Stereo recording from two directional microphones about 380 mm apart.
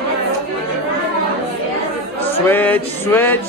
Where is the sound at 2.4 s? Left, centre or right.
Centre.